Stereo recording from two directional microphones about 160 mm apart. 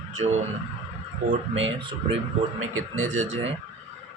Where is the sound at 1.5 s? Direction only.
35° right (ahead or behind).